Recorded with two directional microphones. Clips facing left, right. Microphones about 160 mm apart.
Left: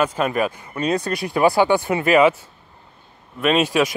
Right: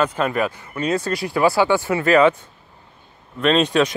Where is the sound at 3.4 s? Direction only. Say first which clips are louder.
Right 1 dB; 10° left (ahead or behind).